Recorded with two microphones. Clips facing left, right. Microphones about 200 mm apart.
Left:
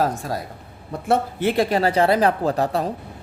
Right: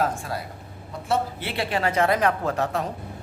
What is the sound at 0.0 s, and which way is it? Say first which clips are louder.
Speech: left 3 dB; 40° left (ahead or behind).